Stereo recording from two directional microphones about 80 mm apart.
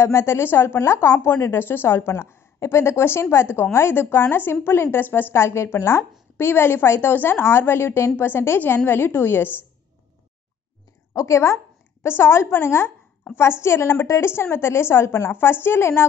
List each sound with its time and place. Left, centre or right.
0.0 s a woman's voice: left
11.1 s a woman's voice: left